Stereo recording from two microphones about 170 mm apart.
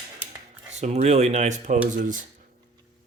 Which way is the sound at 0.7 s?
40° right (ahead or behind).